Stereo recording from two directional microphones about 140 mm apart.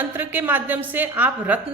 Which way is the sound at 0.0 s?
15° right (ahead or behind).